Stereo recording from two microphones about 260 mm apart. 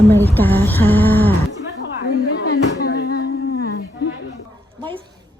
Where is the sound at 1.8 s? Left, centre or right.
Left.